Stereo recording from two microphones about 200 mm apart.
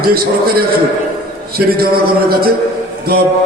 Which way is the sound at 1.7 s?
50° right (ahead or behind).